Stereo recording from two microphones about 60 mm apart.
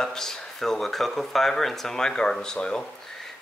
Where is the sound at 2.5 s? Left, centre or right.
Centre.